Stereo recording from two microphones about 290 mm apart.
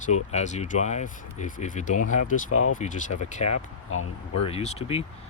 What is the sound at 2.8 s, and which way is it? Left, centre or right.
Speech, left.